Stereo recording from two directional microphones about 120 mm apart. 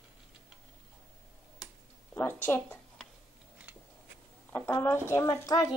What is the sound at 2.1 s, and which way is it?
Speech, 15° left (ahead or behind).